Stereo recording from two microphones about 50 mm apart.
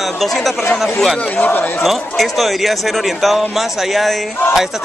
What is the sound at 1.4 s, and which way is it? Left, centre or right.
Speech, left.